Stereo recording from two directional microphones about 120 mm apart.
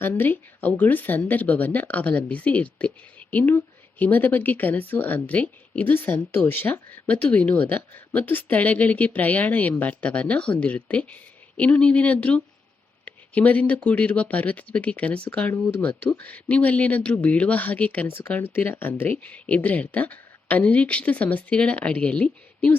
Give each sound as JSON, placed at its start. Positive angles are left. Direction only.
{"t": 0.0, "sound": "speech", "side_deg": 15}